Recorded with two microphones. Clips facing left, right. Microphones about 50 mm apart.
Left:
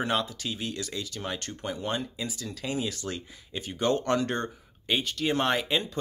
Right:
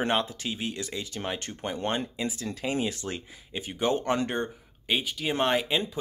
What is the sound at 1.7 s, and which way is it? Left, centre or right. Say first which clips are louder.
Speech: right 3 dB; right.